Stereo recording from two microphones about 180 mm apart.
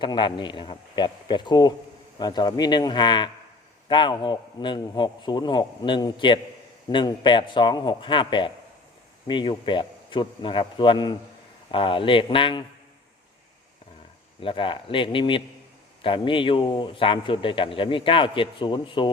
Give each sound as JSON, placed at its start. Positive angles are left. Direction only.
{"t": 0.0, "sound": "a man's voice", "side_deg": 25}
{"t": 14.4, "sound": "a man's voice", "side_deg": 30}